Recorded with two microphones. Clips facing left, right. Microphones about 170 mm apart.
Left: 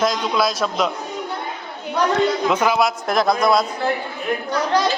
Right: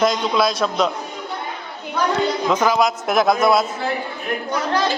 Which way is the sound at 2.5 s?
10° left (ahead or behind).